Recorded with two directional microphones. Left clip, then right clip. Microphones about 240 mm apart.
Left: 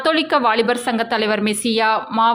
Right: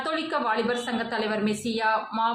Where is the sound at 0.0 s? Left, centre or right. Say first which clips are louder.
Left 11 dB; left.